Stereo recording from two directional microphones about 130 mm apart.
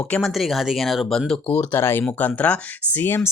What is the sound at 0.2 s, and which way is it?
Speech, centre (ahead or behind).